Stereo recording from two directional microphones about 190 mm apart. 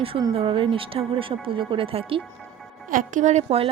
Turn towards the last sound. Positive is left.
turn(degrees=-30)  # may be behind; listen again after turning